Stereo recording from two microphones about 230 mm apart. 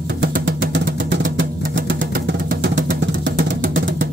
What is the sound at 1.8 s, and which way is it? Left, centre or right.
Vehicle, right.